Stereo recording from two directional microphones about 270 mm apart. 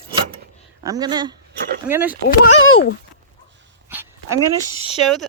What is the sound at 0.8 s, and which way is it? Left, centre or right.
Speech, centre.